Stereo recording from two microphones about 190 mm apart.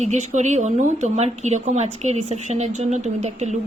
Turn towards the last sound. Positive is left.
turn(degrees=-35)  # may be behind; listen again after turning